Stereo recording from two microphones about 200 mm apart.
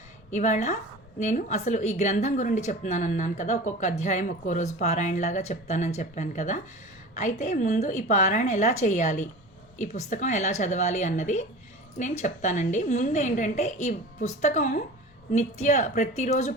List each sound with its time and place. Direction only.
0.3 s a woman's voice: 35° left (ahead or behind)